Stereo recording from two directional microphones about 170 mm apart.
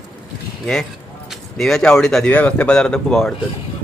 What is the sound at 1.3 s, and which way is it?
Speech, centre (ahead or behind).